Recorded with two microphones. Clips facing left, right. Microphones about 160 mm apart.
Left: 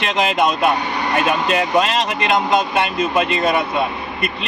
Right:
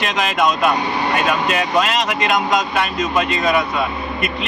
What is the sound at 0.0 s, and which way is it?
Speech, 25° left (ahead or behind).